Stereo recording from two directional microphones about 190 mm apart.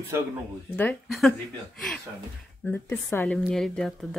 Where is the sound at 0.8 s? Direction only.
5° left (ahead or behind).